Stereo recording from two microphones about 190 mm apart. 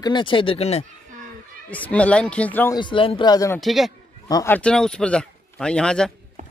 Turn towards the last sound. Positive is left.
turn(degrees=5)  # may be behind; listen again after turning